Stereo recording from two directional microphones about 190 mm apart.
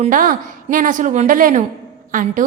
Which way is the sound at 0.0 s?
45° right (ahead or behind).